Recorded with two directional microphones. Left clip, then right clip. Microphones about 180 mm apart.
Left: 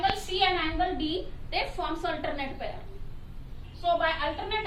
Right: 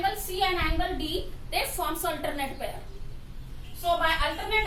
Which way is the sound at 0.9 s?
15° right (ahead or behind).